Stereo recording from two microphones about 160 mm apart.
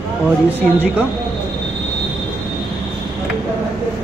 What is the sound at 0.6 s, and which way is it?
Speech, 10° right (ahead or behind).